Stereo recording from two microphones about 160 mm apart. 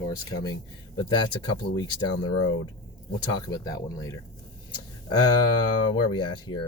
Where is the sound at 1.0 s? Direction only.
25° left (ahead or behind).